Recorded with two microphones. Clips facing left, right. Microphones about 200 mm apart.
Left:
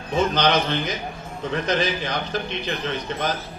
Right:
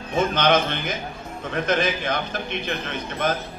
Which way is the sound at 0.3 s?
55° right (ahead or behind).